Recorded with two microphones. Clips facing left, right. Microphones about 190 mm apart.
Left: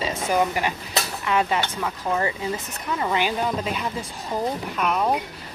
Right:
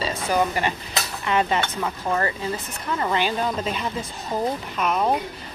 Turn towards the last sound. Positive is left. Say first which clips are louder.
# right 1 dB
turn(degrees=-5)  # may be behind; listen again after turning